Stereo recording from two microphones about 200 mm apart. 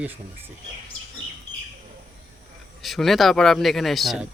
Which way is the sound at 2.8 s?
Centre (ahead or behind).